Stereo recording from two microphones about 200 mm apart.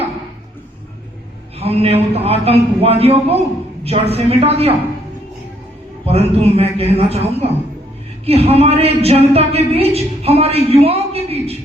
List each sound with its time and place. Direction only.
1.5 s a man's voice: 30° right (ahead or behind)
6.1 s a woman's voice: 30° right (ahead or behind)